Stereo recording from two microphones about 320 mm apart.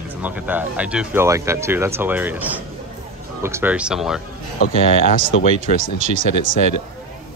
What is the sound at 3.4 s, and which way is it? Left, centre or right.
Speech, centre.